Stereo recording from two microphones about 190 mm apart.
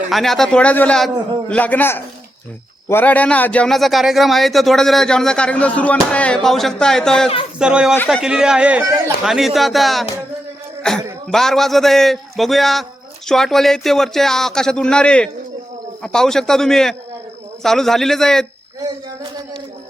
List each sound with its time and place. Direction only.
0.1 s a man's voice: centre (ahead or behind)
7.9 s a man's voice: 5° left (ahead or behind)
8.2 s a man's voice: 5° right (ahead or behind)
18.8 s a sound: 20° right (ahead or behind)